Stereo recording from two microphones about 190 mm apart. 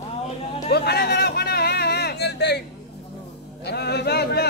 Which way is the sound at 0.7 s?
55° left (ahead or behind).